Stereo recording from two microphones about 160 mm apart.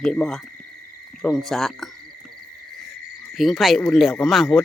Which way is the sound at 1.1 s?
5° left (ahead or behind).